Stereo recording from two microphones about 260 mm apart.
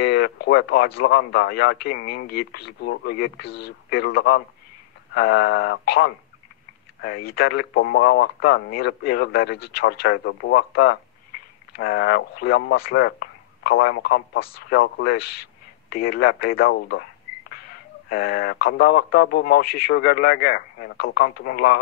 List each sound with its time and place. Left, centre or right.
0.0 s a man's voice: left
18.1 s a man's voice: left